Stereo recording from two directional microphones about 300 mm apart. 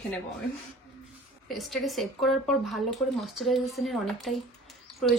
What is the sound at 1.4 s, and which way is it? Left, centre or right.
Speech, centre.